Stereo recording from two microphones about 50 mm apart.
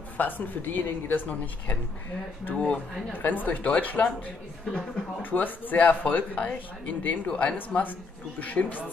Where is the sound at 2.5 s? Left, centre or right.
Left.